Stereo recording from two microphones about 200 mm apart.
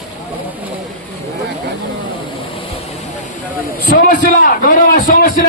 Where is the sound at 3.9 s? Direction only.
40° left (ahead or behind).